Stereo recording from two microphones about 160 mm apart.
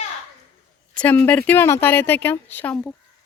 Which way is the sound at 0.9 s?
10° left (ahead or behind).